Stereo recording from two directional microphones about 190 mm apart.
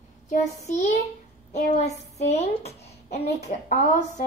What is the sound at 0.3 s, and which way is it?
A woman's voice, 35° left (ahead or behind).